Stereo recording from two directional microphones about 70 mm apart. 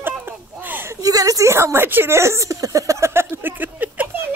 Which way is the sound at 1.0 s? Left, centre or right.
Right.